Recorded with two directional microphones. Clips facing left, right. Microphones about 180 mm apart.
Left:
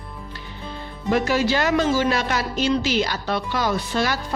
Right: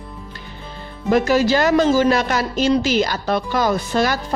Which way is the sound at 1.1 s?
40° right (ahead or behind).